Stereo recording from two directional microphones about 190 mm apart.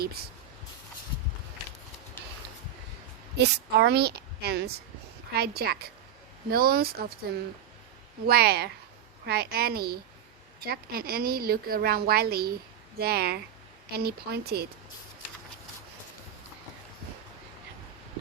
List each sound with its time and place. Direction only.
3.3 s a woman's voice: 60° right (ahead or behind)
8.3 s a woman's voice: 55° right (ahead or behind)